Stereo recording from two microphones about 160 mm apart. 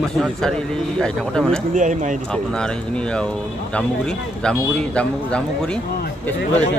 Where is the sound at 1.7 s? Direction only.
50° right (ahead or behind).